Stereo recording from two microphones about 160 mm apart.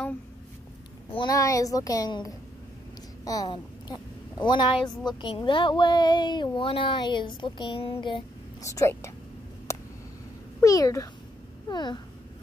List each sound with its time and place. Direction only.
1.1 s a woman's voice: 25° left (ahead or behind)
8.6 s a woman's voice: 20° left (ahead or behind)
9.7 s a sound: 20° left (ahead or behind)
10.6 s a woman's voice: 20° left (ahead or behind)